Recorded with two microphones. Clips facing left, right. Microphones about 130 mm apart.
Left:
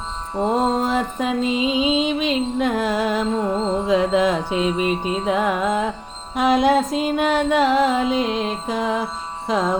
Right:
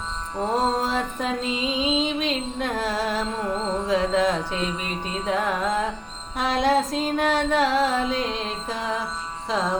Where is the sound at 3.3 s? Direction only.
25° left (ahead or behind).